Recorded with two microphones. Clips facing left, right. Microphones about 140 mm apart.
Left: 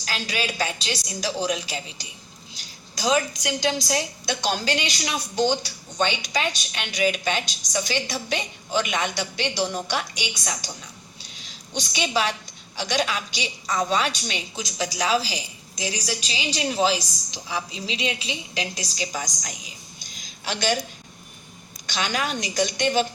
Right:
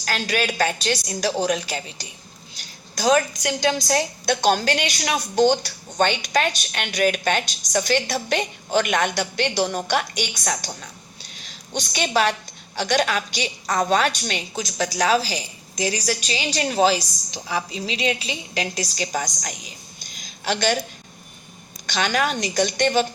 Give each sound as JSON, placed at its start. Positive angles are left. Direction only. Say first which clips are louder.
{"t": 0.0, "sound": "a woman's voice", "louder": "right 5 dB", "side_deg": -55}
{"t": 21.8, "sound": "a woman's voice", "louder": "right 4 dB", "side_deg": -50}